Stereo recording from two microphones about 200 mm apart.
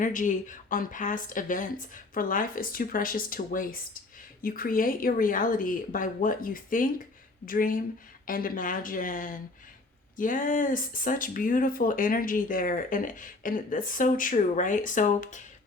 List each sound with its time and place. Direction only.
0.0 s a woman's voice: 40° left (ahead or behind)